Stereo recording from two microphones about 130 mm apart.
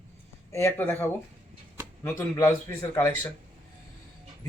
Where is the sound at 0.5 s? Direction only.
20° left (ahead or behind).